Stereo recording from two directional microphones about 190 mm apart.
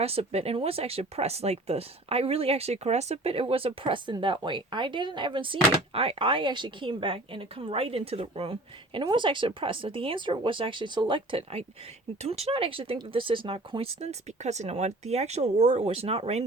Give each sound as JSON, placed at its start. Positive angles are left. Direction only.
{"t": 0.0, "sound": "speech", "side_deg": -30}